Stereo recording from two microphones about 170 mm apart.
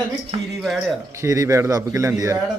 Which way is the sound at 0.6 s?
Centre (ahead or behind).